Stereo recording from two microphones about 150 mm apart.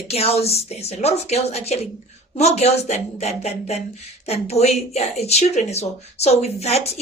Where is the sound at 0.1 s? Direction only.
45° left (ahead or behind).